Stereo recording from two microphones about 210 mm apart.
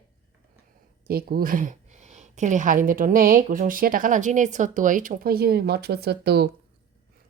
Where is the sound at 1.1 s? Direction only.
45° right (ahead or behind).